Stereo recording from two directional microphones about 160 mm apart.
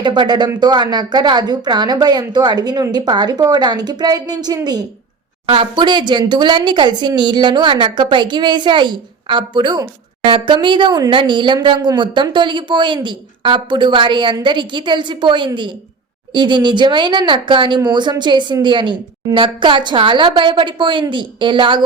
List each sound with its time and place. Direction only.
0.0 s speech: 25° right (ahead or behind)